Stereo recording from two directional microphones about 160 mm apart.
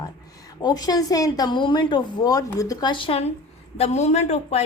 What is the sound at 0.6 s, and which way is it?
A woman's voice, 25° left (ahead or behind).